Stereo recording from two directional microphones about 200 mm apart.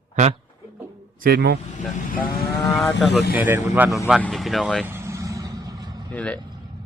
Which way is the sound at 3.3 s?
10° right (ahead or behind).